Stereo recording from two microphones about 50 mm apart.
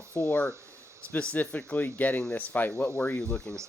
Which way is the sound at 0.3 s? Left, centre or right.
Left.